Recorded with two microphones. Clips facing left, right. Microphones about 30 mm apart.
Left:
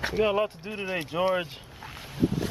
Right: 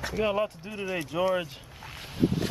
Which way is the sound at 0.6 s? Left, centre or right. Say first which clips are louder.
Left 1 dB; left.